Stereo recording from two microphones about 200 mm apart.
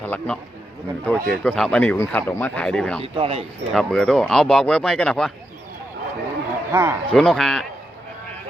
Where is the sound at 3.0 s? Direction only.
30° right (ahead or behind).